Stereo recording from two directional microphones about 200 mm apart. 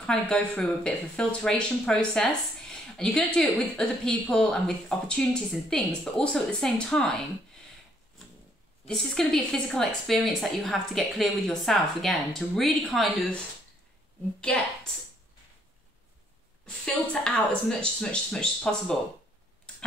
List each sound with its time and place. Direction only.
0.0 s speech: 5° left (ahead or behind)
8.8 s speech: 5° left (ahead or behind)
16.6 s speech: 5° left (ahead or behind)